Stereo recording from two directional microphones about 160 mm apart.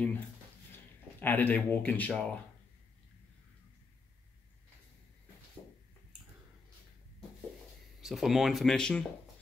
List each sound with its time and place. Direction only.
1.2 s speech: 10° left (ahead or behind)
8.0 s speech: centre (ahead or behind)